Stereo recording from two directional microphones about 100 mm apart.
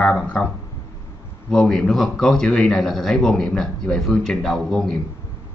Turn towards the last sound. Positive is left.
turn(degrees=5)  # may be behind; listen again after turning